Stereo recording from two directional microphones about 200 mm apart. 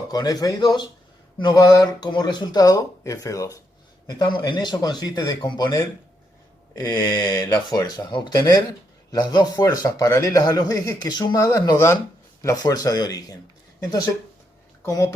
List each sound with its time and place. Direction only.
0.1 s speech: 20° left (ahead or behind)